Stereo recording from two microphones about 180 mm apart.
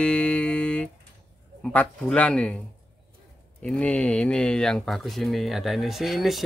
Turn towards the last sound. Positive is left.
turn(degrees=0)  # may be behind; listen again after turning